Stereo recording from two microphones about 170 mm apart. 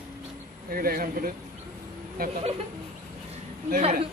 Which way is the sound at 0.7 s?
60° right (ahead or behind).